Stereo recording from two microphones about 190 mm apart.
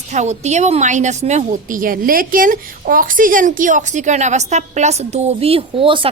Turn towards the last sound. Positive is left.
turn(degrees=-25)  # may be behind; listen again after turning